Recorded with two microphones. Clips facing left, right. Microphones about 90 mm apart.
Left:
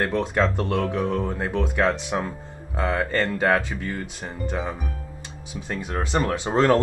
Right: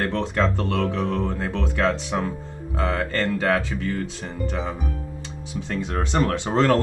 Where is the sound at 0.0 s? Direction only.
15° left (ahead or behind).